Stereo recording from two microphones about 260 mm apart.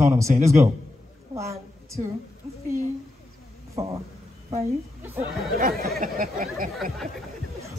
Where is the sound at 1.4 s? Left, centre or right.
Centre.